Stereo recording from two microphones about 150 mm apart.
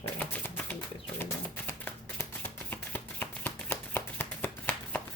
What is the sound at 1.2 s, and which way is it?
Music, 15° left (ahead or behind).